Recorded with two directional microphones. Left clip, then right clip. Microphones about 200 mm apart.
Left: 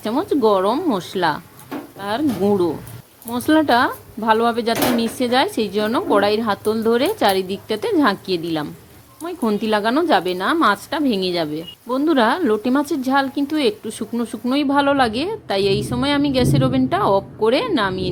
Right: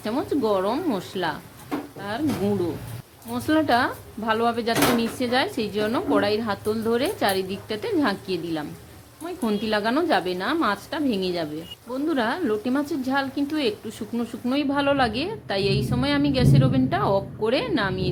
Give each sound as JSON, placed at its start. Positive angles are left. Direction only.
{"t": 0.0, "sound": "speech", "side_deg": 25}